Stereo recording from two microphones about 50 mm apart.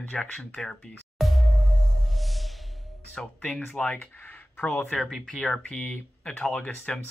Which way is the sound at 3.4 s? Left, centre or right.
Left.